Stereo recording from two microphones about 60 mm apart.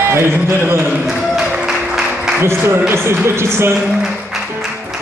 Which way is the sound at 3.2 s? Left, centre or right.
Right.